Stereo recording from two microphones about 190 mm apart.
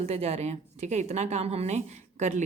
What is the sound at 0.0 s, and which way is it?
Speech, 35° right (ahead or behind).